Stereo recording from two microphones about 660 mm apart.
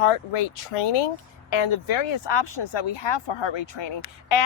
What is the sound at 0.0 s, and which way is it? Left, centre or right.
Speech, left.